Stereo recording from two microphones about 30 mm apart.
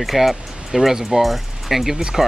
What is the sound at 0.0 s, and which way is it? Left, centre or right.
Speech, centre.